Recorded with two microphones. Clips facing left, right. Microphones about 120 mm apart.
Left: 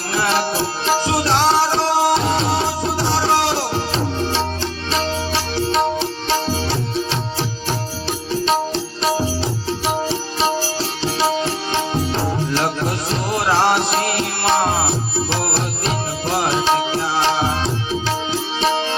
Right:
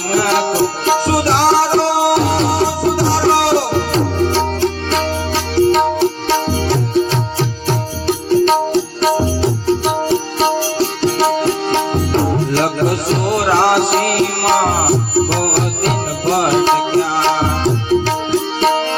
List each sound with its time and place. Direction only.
0.1 s music: 50° right (ahead or behind)
2.4 s music: 45° right (ahead or behind)
3.1 s music: 65° right (ahead or behind); by 11.8 s 45° right (ahead or behind)
11.8 s music: 60° right (ahead or behind)